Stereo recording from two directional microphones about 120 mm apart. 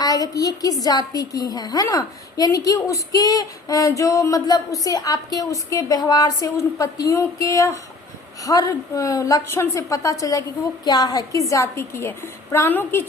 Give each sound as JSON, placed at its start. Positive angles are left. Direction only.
{"t": 0.0, "sound": "a woman's voice", "side_deg": 30}